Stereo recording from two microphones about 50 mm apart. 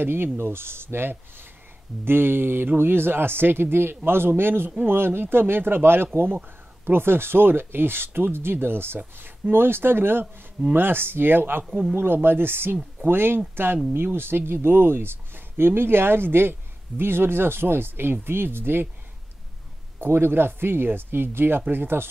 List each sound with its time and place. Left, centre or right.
0.0 s speech: right
20.0 s speech: right